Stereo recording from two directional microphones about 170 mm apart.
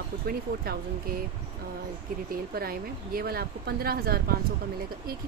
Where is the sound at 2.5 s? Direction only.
60° right (ahead or behind).